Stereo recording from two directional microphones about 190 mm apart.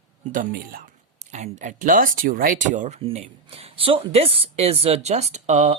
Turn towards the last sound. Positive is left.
turn(degrees=-40)  # may be behind; listen again after turning